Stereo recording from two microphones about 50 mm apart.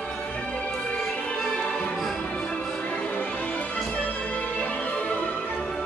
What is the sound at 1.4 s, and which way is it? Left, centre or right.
Music, centre.